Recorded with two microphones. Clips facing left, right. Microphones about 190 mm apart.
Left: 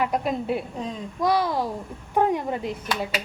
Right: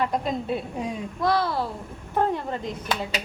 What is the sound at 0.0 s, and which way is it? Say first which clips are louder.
A woman's voice: left 1 dB; 10° left (ahead or behind).